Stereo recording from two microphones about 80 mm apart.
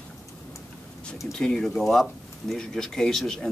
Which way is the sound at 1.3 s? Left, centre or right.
Centre.